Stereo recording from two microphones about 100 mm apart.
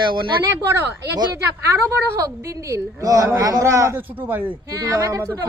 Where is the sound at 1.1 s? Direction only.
40° right (ahead or behind).